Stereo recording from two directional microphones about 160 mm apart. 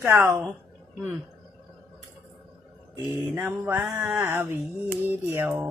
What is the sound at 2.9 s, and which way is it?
Speech, 20° right (ahead or behind).